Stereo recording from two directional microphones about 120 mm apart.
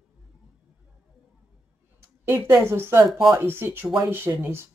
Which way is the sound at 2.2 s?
20° right (ahead or behind).